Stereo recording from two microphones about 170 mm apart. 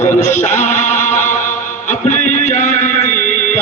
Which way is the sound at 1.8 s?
45° left (ahead or behind).